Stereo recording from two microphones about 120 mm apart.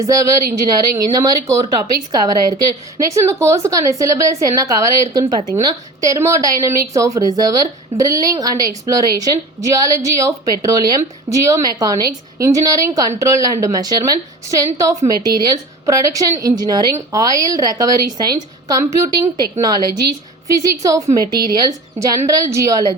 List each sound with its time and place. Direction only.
0.0 s a woman's voice: 30° right (ahead or behind)